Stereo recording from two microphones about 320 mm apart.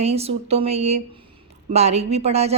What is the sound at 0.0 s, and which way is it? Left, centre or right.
A woman's voice, centre.